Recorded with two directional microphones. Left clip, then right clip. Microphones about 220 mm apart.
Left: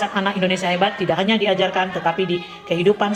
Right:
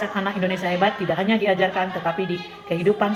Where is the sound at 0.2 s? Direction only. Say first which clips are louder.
Left 4 dB; 30° left (ahead or behind).